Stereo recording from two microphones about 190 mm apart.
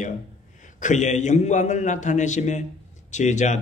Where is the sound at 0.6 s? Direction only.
40° left (ahead or behind).